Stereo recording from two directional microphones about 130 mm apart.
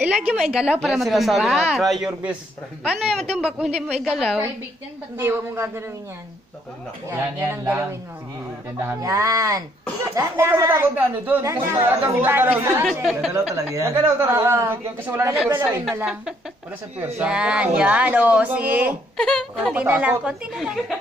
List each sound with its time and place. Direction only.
0.0 s a woman's voice: 10° right (ahead or behind)
5.1 s speech: 20° right (ahead or behind)
7.1 s a man's voice: 20° right (ahead or behind)
17.0 s speech: 10° right (ahead or behind)
19.1 s a woman's voice: 5° left (ahead or behind)
19.7 s speech: 10° right (ahead or behind)